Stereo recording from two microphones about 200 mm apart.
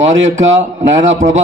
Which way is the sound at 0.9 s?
35° right (ahead or behind).